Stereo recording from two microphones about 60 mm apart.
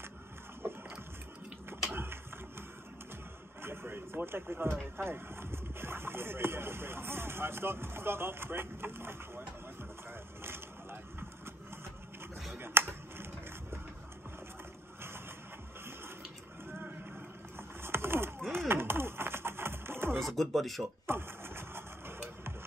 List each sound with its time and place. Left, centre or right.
0.6 s a sound: right
2.0 s printer: right
3.6 s speech: right
10.4 s vehicle: right
12.5 s finger snapping: right
15.0 s a sound: right
17.6 s a sound: right
18.7 s music: right
20.2 s speech: centre
21.1 s vehicle: right